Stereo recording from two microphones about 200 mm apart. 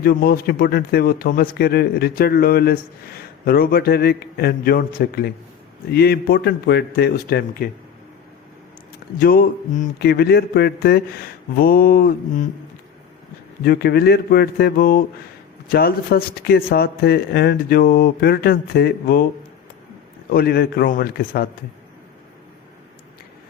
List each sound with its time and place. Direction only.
0.0 s a man's voice: 50° left (ahead or behind)
9.1 s a man's voice: 45° left (ahead or behind)
13.7 s a man's voice: 50° left (ahead or behind)
20.3 s a man's voice: 50° left (ahead or behind)